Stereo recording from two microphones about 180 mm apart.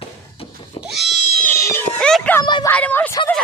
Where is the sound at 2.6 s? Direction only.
10° left (ahead or behind).